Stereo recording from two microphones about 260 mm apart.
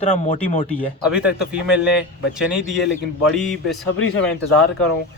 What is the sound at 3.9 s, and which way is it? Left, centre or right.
Speech, left.